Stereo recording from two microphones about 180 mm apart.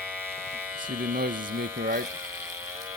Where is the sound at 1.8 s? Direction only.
55° right (ahead or behind).